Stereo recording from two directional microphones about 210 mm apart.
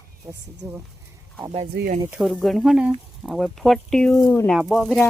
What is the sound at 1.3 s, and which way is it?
Speech, 25° right (ahead or behind).